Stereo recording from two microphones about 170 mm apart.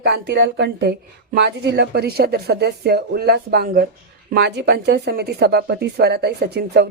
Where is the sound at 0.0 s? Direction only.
80° right.